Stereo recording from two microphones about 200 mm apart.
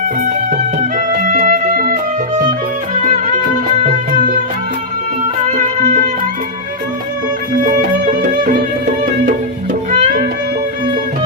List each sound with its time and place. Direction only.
0.5 s music: 40° right (ahead or behind)
7.6 s music: 40° right (ahead or behind)
9.9 s music: 40° right (ahead or behind)